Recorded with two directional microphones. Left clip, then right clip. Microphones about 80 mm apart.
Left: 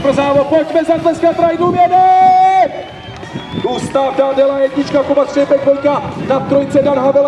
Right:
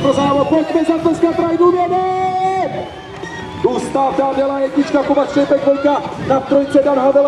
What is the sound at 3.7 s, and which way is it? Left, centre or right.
A man's voice, left.